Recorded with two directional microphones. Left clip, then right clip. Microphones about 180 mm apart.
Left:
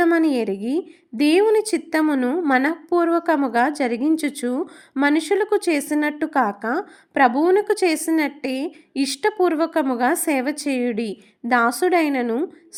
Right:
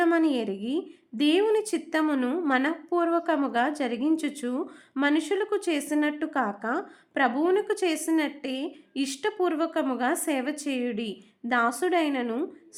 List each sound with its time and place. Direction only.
0.0 s a woman's voice: 25° left (ahead or behind)